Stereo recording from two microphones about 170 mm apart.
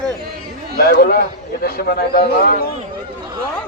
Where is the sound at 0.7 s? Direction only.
60° left (ahead or behind).